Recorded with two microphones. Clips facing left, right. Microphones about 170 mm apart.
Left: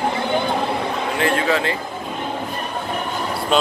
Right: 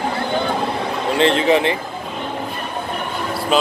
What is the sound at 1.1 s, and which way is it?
Speech, 25° right (ahead or behind).